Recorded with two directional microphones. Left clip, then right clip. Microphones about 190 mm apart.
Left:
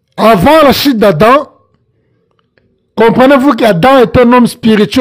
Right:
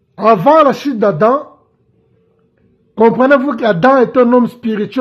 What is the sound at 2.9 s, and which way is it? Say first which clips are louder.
Speech: left 4 dB; 30° left (ahead or behind).